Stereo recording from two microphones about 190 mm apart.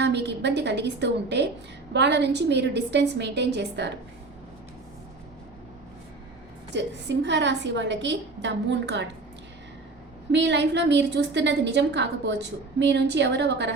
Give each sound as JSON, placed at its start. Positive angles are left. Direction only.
{"t": 0.0, "sound": "a woman's voice", "side_deg": -65}
{"t": 6.7, "sound": "a woman's voice", "side_deg": -65}
{"t": 10.3, "sound": "a woman's voice", "side_deg": -65}